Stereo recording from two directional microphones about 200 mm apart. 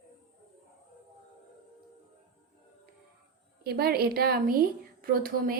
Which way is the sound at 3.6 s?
50° right (ahead or behind).